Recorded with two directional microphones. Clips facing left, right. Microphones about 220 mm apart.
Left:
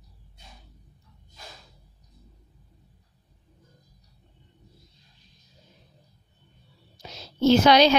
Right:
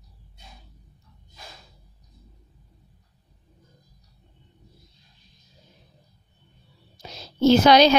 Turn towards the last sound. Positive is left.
turn(degrees=-40)  # may be behind; listen again after turning